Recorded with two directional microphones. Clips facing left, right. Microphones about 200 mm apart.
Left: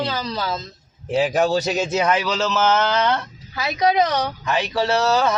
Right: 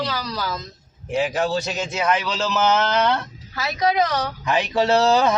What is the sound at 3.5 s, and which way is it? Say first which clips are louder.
Speech: left 2 dB; 15° left (ahead or behind).